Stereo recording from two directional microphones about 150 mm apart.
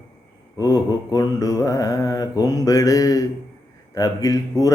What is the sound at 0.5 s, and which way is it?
A man's voice, 25° left (ahead or behind).